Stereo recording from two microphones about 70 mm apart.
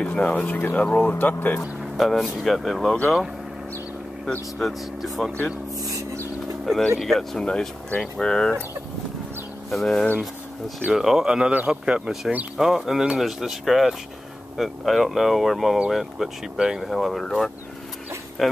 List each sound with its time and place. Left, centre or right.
0.0 s speech: centre
2.0 s speech: centre
4.6 s speech: centre
5.8 s a sound: right
6.6 s speech: centre
9.7 s a man's voice: centre